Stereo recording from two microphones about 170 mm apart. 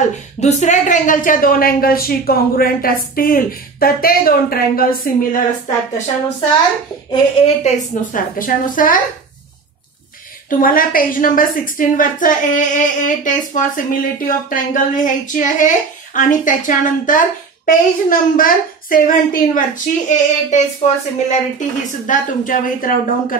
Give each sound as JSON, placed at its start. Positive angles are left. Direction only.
{"t": 0.4, "sound": "a woman's voice", "side_deg": 45}
{"t": 7.1, "sound": "a woman's voice", "side_deg": 40}
{"t": 10.5, "sound": "a woman's voice", "side_deg": 55}